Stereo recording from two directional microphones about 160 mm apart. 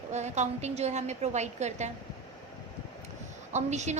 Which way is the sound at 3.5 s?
45° right (ahead or behind).